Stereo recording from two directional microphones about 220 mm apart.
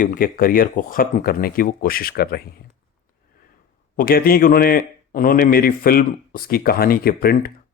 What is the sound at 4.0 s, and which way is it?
Speech, 40° left (ahead or behind).